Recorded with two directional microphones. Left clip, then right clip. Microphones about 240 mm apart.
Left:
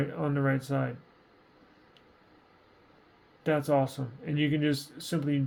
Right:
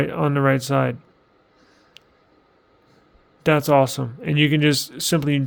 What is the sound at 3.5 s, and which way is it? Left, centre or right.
Speech, right.